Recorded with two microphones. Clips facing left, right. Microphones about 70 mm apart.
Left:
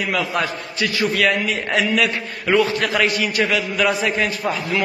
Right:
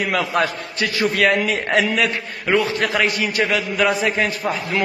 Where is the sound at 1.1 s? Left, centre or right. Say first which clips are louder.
Right 1 dB; right.